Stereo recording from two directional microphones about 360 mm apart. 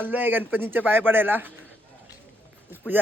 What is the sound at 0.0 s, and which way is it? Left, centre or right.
A man's voice, centre.